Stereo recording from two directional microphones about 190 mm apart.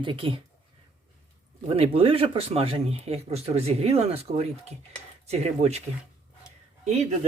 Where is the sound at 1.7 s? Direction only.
30° right (ahead or behind).